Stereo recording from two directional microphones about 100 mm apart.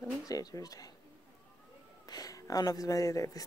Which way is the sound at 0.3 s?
40° left (ahead or behind).